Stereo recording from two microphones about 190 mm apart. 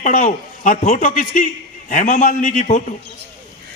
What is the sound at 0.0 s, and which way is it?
A man's voice, 40° left (ahead or behind).